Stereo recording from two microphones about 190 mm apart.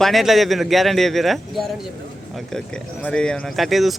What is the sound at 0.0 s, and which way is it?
A man's voice, centre (ahead or behind).